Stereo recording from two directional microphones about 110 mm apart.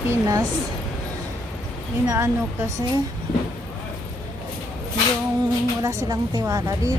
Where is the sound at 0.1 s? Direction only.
30° right (ahead or behind).